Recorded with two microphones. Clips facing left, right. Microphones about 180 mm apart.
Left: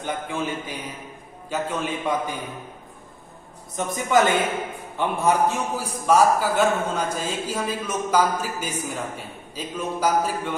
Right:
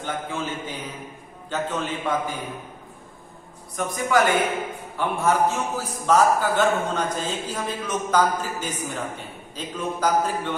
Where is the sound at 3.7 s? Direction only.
20° left (ahead or behind).